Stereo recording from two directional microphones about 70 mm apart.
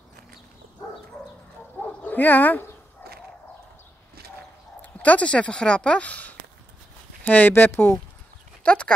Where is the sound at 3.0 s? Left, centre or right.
Left.